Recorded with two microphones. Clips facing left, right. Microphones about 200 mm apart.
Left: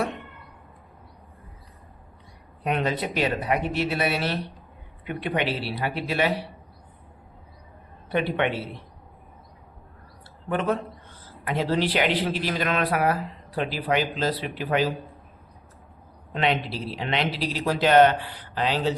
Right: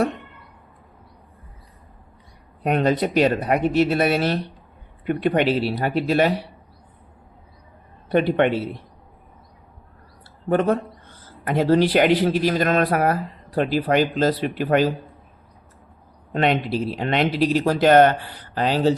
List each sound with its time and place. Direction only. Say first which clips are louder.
2.6 s speech: right 6 dB; 45° right (ahead or behind)
8.1 s speech: right 6 dB; 45° right (ahead or behind)
10.5 s speech: right 6 dB; 45° right (ahead or behind)
16.3 s speech: right 5 dB; 50° right (ahead or behind)